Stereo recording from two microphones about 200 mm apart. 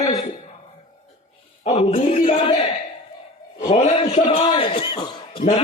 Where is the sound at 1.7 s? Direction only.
30° left (ahead or behind).